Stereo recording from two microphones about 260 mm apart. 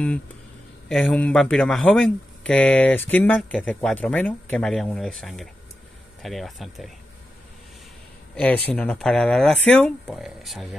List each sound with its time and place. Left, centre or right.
0.8 s speech: centre
8.6 s speech: centre